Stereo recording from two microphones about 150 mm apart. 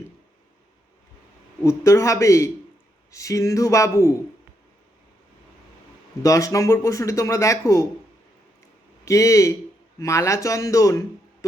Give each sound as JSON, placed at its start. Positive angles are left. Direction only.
{"t": 1.6, "sound": "speech", "side_deg": 20}
{"t": 6.2, "sound": "speech", "side_deg": 20}
{"t": 9.0, "sound": "speech", "side_deg": 20}